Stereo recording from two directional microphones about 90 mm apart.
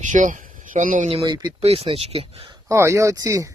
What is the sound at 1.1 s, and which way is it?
Speech, 90° right.